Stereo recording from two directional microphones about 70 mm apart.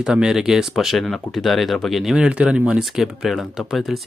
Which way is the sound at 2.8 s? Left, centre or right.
Centre.